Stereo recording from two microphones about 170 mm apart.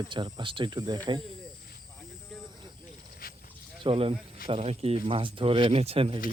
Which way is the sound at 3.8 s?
35° right (ahead or behind).